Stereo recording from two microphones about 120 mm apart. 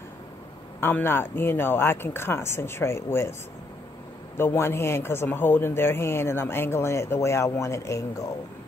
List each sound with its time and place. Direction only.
0.7 s speech: 20° left (ahead or behind)
4.4 s speech: 20° left (ahead or behind)